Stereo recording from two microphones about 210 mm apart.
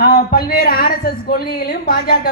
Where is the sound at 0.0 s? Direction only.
45° left (ahead or behind).